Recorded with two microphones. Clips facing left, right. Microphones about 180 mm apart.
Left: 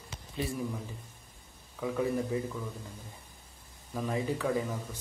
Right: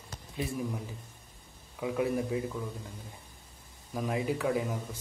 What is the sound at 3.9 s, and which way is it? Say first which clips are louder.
Speech: right 1 dB; 10° right (ahead or behind).